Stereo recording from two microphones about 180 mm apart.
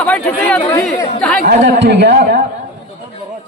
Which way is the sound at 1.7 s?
75° right (ahead or behind).